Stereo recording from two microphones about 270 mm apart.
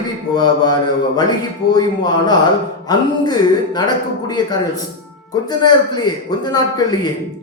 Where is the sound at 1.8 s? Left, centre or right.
Centre.